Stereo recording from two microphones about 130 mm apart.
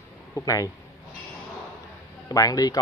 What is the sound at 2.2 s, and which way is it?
Speech, 30° left (ahead or behind).